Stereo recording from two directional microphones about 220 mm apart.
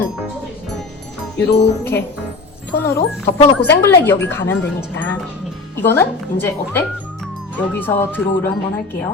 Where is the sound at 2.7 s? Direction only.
10° left (ahead or behind).